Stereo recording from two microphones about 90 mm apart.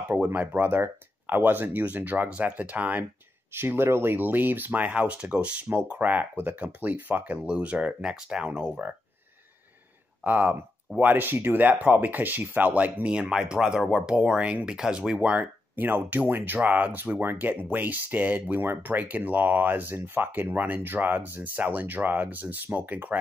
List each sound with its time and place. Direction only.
0.1 s speech: 20° right (ahead or behind)
10.2 s speech: 20° right (ahead or behind)
15.7 s speech: 20° right (ahead or behind)